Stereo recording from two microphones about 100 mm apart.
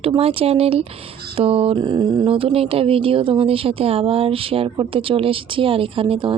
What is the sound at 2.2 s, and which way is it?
A woman's voice, 70° right (ahead or behind).